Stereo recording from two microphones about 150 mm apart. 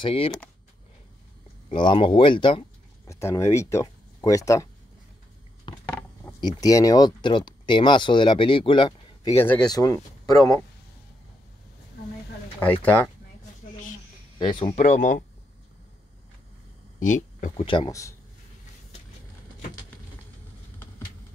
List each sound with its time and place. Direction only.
0.0 s speech: 40° left (ahead or behind)
1.7 s speech: 35° left (ahead or behind)
3.1 s speech: 20° left (ahead or behind)
5.7 s a sound: 30° left (ahead or behind)
6.4 s speech: 25° left (ahead or behind)
9.3 s speech: 15° left (ahead or behind)
12.5 s speech: 10° left (ahead or behind)
14.4 s speech: 35° left (ahead or behind)
14.7 s speech: 50° left (ahead or behind)
17.0 s speech: 55° left (ahead or behind)
17.6 s speech: 30° left (ahead or behind)